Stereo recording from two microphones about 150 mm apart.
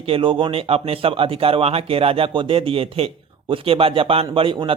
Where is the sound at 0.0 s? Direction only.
35° right (ahead or behind).